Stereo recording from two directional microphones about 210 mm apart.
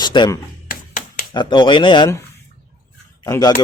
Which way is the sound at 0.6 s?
40° left (ahead or behind).